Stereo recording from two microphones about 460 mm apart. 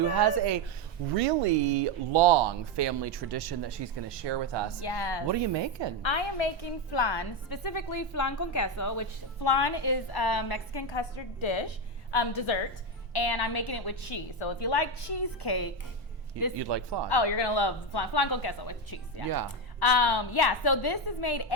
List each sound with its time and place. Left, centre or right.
0.1 s speech: right
1.8 s speech: right
4.8 s a woman's voice: left
5.3 s a woman's voice: right
6.0 s a woman's voice: left
9.4 s a woman's voice: left
12.1 s a woman's voice: left
13.1 s a woman's voice: left
14.3 s a woman's voice: left
16.6 s speech: right
17.1 s a woman's voice: left
19.2 s speech: right
19.8 s a woman's voice: left